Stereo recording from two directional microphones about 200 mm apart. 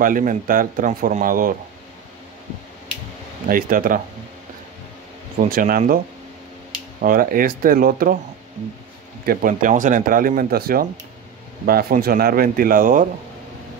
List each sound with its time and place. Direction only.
0.0 s a man's voice: 40° right (ahead or behind)
3.4 s a man's voice: 45° right (ahead or behind)
5.4 s a man's voice: 45° right (ahead or behind)
7.0 s a man's voice: 45° right (ahead or behind)
9.2 s a man's voice: 50° right (ahead or behind)